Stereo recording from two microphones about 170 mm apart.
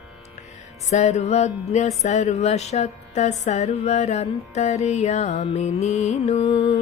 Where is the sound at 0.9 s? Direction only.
40° left (ahead or behind).